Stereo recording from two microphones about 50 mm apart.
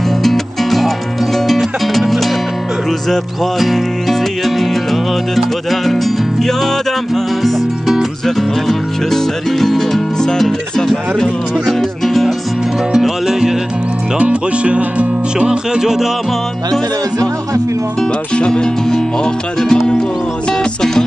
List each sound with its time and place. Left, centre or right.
0.2 s music: centre
7.4 s speech: centre
11.6 s music: centre
12.9 s music: centre
14.1 s music: right
15.4 s music: centre
18.3 s music: centre